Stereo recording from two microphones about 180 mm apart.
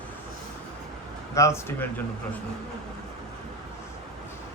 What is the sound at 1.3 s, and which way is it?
Speech, 15° left (ahead or behind).